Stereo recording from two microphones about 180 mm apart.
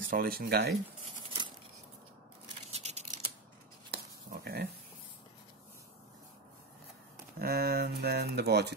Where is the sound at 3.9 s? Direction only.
60° right (ahead or behind).